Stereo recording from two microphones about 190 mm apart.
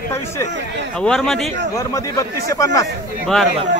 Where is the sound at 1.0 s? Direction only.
Centre (ahead or behind).